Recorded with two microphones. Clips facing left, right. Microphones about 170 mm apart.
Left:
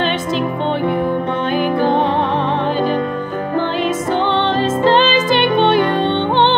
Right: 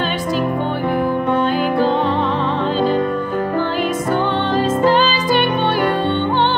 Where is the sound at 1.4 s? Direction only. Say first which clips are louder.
Even; 20° left (ahead or behind).